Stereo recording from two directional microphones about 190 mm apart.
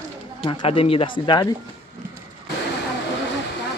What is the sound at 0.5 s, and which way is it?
Speech, 30° left (ahead or behind).